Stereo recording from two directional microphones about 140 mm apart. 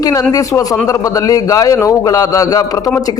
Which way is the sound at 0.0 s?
25° left (ahead or behind).